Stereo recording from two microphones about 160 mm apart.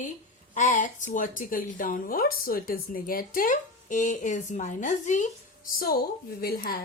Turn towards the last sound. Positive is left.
turn(degrees=70)  # may be behind; listen again after turning